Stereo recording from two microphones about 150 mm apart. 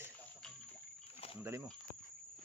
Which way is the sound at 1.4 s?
15° right (ahead or behind).